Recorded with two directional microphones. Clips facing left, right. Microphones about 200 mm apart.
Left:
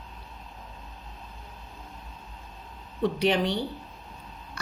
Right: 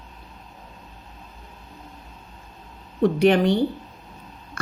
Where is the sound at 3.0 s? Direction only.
50° right (ahead or behind).